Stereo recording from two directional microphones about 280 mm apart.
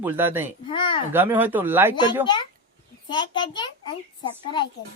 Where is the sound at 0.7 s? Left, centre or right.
Centre.